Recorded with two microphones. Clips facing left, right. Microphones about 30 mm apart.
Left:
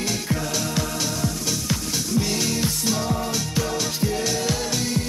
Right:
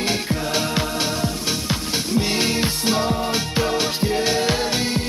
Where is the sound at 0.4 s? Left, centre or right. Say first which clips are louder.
Right 3 dB; right.